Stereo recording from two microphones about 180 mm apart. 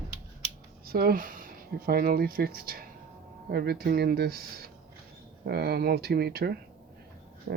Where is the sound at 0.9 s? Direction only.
55° right (ahead or behind).